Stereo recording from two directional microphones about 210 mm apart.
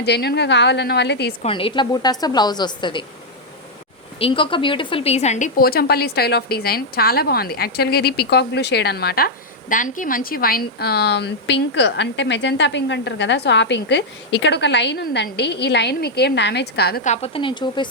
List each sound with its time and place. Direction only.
0.0 s a woman's voice: 50° left (ahead or behind)
1.4 s a woman's voice: 25° left (ahead or behind)
4.2 s a woman's voice: 25° left (ahead or behind); by 17.0 s 50° left (ahead or behind)
17.0 s a woman's voice: 30° left (ahead or behind)